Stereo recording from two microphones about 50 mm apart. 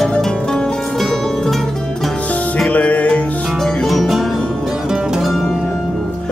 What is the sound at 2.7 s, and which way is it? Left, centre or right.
Music, left.